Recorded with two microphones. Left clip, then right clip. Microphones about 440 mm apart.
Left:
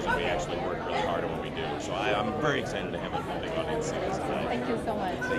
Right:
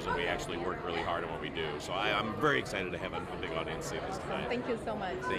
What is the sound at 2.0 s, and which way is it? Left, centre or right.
Speech, right.